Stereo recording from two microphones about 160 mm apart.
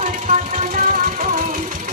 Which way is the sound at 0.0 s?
50° right (ahead or behind).